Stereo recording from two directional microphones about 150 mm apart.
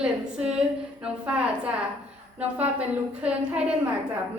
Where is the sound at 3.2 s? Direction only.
5° right (ahead or behind).